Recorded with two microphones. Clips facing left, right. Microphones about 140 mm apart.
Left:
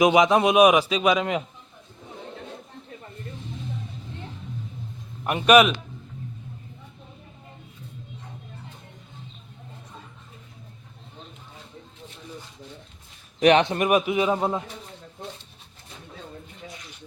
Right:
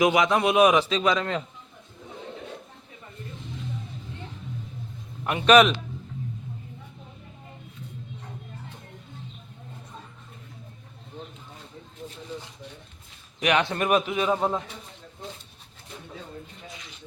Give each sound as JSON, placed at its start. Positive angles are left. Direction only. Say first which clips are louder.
{"t": 0.0, "sound": "a man's voice", "louder": "left 3 dB", "side_deg": 20}
{"t": 5.2, "sound": "a man's voice", "louder": "even", "side_deg": 15}
{"t": 13.4, "sound": "speech", "louder": "left 6 dB", "side_deg": 30}
{"t": 13.7, "sound": "a man's voice", "louder": "left 2 dB", "side_deg": 15}